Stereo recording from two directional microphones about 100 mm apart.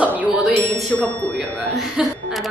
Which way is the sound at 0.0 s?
15° right (ahead or behind).